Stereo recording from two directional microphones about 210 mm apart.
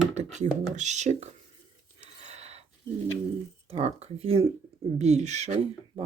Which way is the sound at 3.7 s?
30° right (ahead or behind).